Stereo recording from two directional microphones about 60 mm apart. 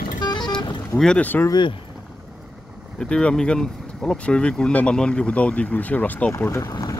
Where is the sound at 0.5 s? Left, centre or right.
Centre.